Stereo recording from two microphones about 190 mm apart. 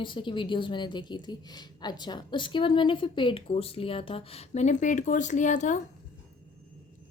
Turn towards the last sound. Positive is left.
turn(degrees=40)  # may be behind; listen again after turning